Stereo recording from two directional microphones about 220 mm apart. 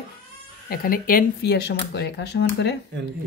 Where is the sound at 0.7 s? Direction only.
40° left (ahead or behind).